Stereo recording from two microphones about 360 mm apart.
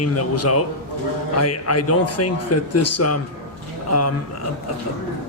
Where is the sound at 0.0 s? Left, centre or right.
Left.